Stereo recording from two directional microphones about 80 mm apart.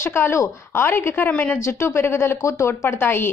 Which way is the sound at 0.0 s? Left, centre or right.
Left.